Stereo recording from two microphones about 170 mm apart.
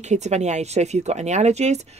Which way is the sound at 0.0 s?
40° right (ahead or behind).